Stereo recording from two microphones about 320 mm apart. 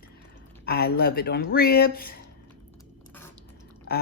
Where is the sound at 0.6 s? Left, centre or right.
Left.